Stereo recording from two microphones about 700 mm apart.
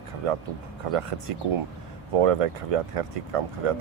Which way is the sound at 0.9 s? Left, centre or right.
Right.